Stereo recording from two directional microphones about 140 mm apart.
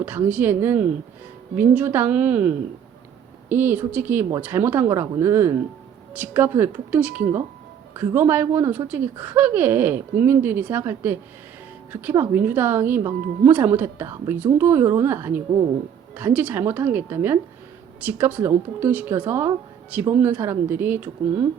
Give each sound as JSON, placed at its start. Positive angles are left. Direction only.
{"t": 0.0, "sound": "speech", "side_deg": -10}